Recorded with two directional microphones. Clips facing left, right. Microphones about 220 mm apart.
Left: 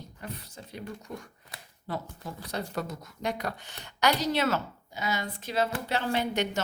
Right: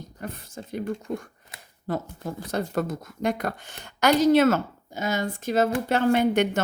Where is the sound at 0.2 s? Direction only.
50° right (ahead or behind).